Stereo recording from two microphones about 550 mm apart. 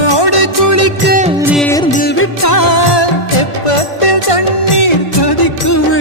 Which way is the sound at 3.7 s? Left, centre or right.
Left.